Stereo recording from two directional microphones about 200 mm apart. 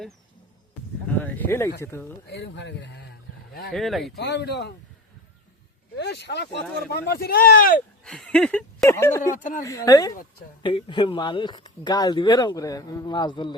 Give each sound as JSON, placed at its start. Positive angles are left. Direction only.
{"t": 1.0, "sound": "speech", "side_deg": 10}
{"t": 2.2, "sound": "speech", "side_deg": 60}
{"t": 3.7, "sound": "speech", "side_deg": 0}
{"t": 4.2, "sound": "speech", "side_deg": 60}
{"t": 6.0, "sound": "speech", "side_deg": 55}
{"t": 8.0, "sound": "speech", "side_deg": 5}
{"t": 9.3, "sound": "a woman's voice", "side_deg": 40}
{"t": 9.6, "sound": "speech", "side_deg": 15}